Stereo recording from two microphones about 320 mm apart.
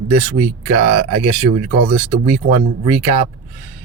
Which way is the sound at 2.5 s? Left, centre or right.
Centre.